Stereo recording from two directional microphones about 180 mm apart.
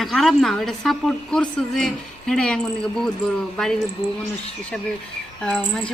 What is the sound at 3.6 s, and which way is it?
Speech, centre (ahead or behind).